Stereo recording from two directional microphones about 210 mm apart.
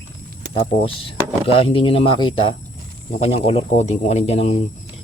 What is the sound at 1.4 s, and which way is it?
Speech, 25° left (ahead or behind).